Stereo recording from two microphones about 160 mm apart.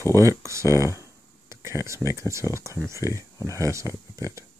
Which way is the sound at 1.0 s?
20° right (ahead or behind).